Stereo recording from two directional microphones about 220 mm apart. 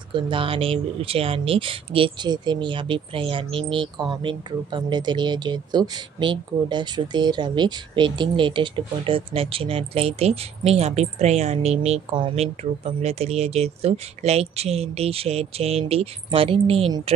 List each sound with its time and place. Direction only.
0.1 s speech: 25° right (ahead or behind)